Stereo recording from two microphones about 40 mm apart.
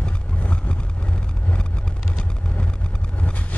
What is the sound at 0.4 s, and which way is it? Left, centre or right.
Vehicle, left.